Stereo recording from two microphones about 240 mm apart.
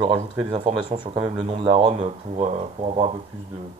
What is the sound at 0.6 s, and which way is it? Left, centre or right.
Speech, right.